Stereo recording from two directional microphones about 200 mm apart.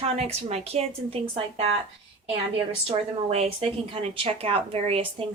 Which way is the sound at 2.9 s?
30° right (ahead or behind).